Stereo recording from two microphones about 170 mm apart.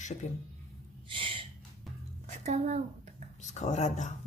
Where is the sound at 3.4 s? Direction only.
45° left (ahead or behind).